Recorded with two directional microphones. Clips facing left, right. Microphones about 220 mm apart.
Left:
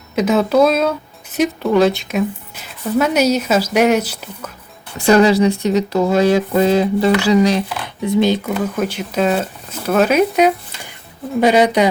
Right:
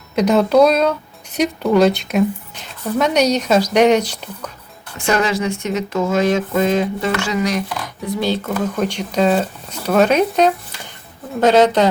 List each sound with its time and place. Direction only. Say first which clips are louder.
0.2 s speech: right 1 dB; 5° left (ahead or behind)
4.9 s speech: left 7 dB; 35° left (ahead or behind); by 8.5 s 20° left (ahead or behind)
8.5 s speech: even; 5° left (ahead or behind)